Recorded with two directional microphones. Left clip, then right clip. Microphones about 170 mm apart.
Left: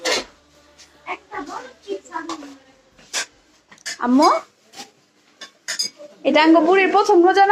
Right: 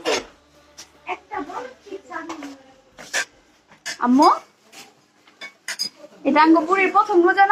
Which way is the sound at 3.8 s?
15° left (ahead or behind).